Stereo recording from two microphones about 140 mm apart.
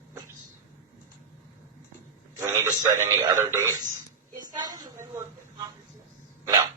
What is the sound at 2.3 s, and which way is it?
A man's voice, 25° right (ahead or behind).